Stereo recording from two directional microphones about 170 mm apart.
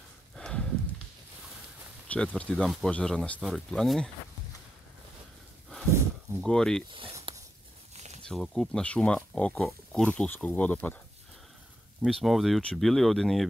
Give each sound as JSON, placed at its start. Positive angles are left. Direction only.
{"t": 0.4, "sound": "horse", "side_deg": 5}
{"t": 2.0, "sound": "speech", "side_deg": 5}
{"t": 6.4, "sound": "speech", "side_deg": 5}
{"t": 7.3, "sound": "a sound", "side_deg": -30}
{"t": 8.2, "sound": "speech", "side_deg": 0}
{"t": 12.0, "sound": "speech", "side_deg": 0}